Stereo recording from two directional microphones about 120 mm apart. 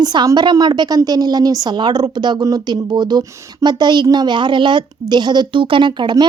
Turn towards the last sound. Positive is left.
turn(degrees=-40)  # may be behind; listen again after turning